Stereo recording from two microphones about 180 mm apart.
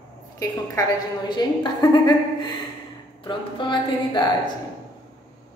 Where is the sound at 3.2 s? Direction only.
25° left (ahead or behind).